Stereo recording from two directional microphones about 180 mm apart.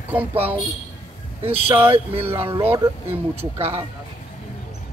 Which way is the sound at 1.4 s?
35° right (ahead or behind).